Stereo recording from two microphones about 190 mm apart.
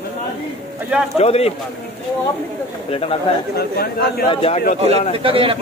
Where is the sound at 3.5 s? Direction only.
55° left (ahead or behind).